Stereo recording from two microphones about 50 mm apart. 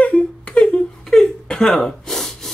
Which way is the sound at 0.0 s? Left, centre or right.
Left.